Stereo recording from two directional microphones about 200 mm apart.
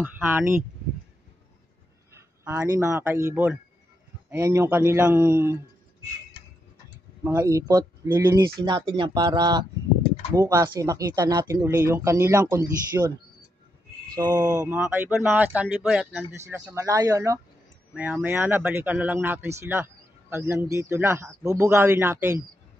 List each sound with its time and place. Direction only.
0.0 s a man's voice: 10° right (ahead or behind)
2.1 s a man's voice: 15° right (ahead or behind)
7.2 s a man's voice: 15° right (ahead or behind)
14.1 s a man's voice: 20° right (ahead or behind)